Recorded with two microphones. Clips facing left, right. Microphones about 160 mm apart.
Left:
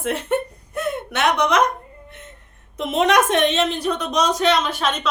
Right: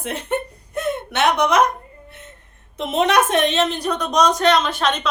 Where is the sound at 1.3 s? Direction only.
5° right (ahead or behind).